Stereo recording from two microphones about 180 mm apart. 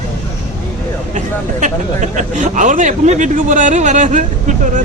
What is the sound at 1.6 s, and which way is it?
Speech, 45° right (ahead or behind).